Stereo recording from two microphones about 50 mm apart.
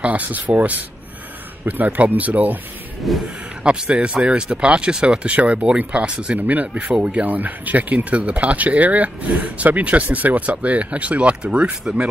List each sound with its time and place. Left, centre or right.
0.0 s speech: right
3.0 s speech: centre
3.6 s speech: right